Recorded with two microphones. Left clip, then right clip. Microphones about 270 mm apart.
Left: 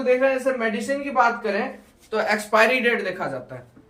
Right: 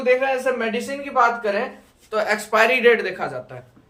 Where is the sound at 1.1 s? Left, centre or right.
Centre.